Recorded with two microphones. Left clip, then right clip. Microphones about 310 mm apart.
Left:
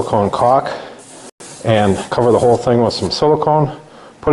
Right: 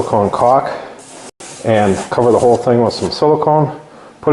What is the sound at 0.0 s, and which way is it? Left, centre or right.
Speech, centre.